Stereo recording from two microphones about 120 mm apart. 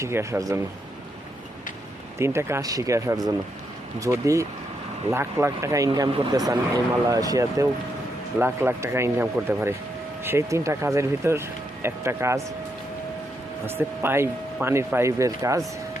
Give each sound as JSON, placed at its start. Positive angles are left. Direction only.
{"t": 0.0, "sound": "speech", "side_deg": -25}
{"t": 2.1, "sound": "speech", "side_deg": -20}
{"t": 6.1, "sound": "speech", "side_deg": -50}
{"t": 6.3, "sound": "speech", "side_deg": -30}
{"t": 13.7, "sound": "speech", "side_deg": -20}